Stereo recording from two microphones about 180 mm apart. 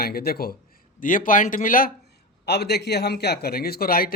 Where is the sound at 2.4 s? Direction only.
65° left (ahead or behind).